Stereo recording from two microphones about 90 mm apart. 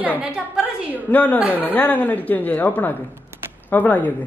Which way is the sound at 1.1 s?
20° left (ahead or behind).